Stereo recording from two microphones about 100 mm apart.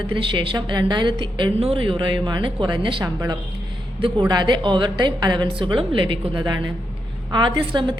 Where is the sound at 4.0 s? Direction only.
60° right (ahead or behind).